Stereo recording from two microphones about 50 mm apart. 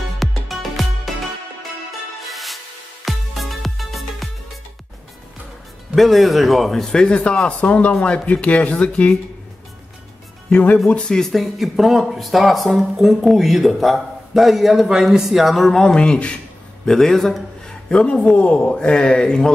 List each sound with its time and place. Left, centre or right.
0.2 s music: centre
2.2 s music: centre
5.9 s speech: centre; by 9.1 s left
10.5 s speech: left
11.1 s speech: centre
11.3 s speech: centre; by 16.3 s left
16.8 s a man's voice: centre
17.8 s speech: centre